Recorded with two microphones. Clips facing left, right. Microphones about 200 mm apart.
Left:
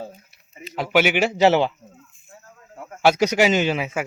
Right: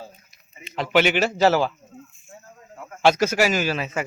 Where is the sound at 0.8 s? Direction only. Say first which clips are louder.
Even; 10° left (ahead or behind).